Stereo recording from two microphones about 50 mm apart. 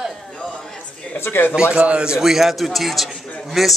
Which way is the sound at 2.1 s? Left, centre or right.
Centre.